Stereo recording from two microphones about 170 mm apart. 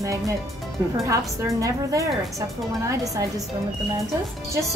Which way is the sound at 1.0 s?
20° right (ahead or behind).